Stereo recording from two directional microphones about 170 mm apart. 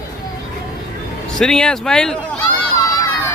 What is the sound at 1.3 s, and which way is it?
Speech, 5° left (ahead or behind).